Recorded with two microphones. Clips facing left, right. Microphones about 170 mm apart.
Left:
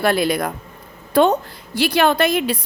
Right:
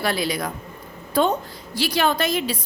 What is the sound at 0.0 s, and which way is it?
Speech, 55° left (ahead or behind).